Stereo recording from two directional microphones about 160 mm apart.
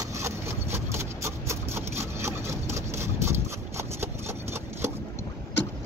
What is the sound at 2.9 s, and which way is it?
Horse, 15° right (ahead or behind).